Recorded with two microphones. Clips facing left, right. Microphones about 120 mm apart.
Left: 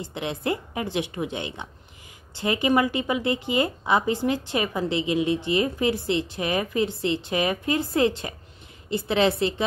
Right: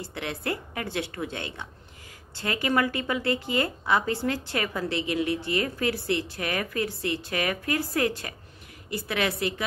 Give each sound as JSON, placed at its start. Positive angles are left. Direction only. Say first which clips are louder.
{"t": 0.0, "sound": "a woman's voice", "louder": "left 4 dB", "side_deg": 20}